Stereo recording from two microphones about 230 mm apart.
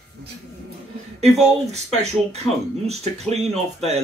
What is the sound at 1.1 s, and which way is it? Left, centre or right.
Speech, right.